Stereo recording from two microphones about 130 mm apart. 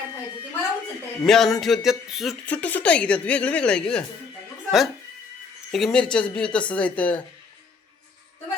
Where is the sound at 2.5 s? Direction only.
10° left (ahead or behind).